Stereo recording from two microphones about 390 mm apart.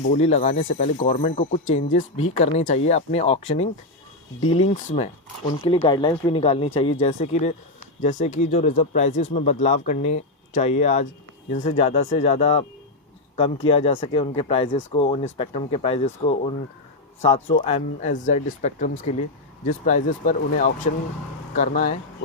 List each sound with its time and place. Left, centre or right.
0.0 s speech: centre
4.5 s speech: centre